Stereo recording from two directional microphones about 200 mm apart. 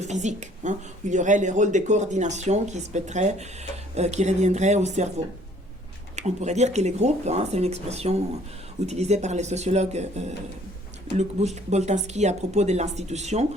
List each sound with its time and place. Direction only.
0.0 s a woman's voice: 35° right (ahead or behind)
6.1 s a woman's voice: 35° right (ahead or behind)
11.4 s a woman's voice: 35° right (ahead or behind)